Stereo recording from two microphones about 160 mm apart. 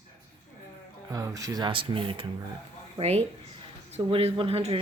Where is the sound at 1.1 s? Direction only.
20° right (ahead or behind).